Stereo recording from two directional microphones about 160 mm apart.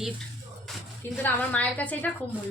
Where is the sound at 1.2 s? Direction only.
10° left (ahead or behind).